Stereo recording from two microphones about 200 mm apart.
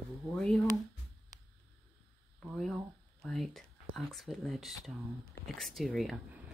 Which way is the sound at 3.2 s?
Centre (ahead or behind).